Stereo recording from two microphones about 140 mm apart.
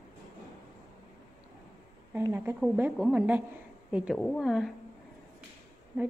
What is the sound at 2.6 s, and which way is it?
A woman's voice, 5° right (ahead or behind).